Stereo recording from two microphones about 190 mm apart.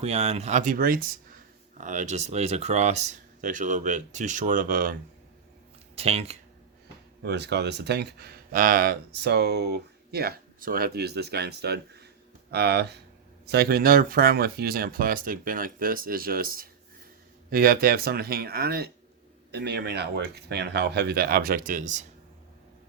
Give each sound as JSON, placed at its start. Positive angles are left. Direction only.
{"t": 0.0, "sound": "speech", "side_deg": -35}
{"t": 6.0, "sound": "speech", "side_deg": -35}
{"t": 7.2, "sound": "speech", "side_deg": -60}